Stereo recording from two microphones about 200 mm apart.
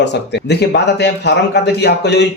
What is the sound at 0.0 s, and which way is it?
A man's voice, 60° left (ahead or behind).